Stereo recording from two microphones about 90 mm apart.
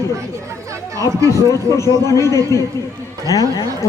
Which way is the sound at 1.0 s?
35° left (ahead or behind).